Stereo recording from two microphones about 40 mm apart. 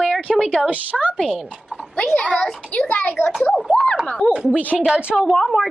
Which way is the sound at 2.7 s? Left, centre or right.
Left.